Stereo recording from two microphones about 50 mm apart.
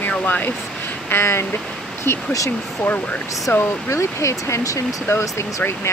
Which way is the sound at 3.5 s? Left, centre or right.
Left.